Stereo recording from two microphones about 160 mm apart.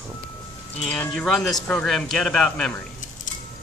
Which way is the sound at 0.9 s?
5° left (ahead or behind).